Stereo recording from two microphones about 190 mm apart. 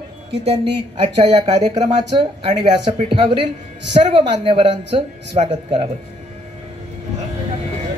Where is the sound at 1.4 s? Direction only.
30° right (ahead or behind).